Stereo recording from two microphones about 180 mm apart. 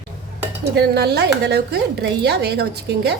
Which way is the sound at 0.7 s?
65° right (ahead or behind).